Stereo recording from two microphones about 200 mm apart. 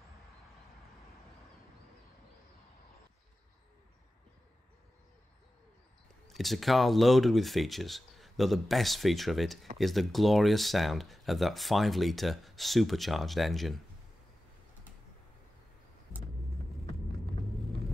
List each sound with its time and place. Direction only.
6.2 s speech: centre (ahead or behind)